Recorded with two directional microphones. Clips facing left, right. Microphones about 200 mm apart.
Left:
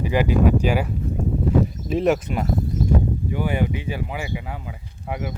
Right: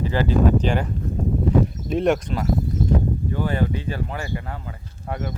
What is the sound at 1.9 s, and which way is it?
Speech, centre (ahead or behind).